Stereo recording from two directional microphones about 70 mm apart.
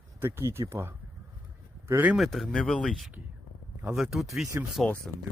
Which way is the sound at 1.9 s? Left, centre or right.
Right.